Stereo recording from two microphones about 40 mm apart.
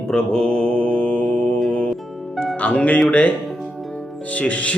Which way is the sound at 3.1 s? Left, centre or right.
Left.